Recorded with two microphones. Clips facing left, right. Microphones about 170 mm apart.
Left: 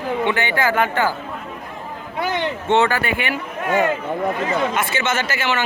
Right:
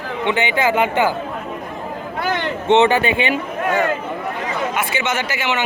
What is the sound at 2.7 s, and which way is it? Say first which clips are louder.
Speech: right 4 dB; 20° right (ahead or behind).